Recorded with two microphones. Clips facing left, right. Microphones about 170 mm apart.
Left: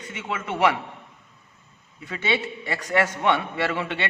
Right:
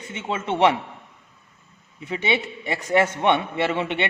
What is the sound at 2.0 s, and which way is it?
A man's voice, 20° right (ahead or behind).